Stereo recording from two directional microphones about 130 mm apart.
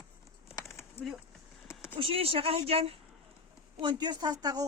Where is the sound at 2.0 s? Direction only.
45° right (ahead or behind).